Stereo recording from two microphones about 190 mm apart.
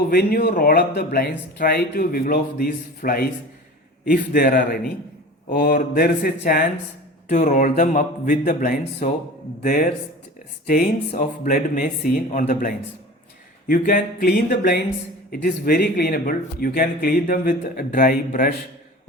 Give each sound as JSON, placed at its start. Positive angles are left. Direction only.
{"t": 0.1, "sound": "speech", "side_deg": 50}
{"t": 7.3, "sound": "speech", "side_deg": 40}